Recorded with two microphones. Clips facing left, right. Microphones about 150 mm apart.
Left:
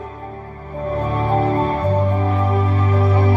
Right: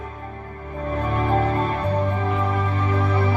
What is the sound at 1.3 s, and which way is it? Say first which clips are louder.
Music: left 4 dB; 30° left (ahead or behind).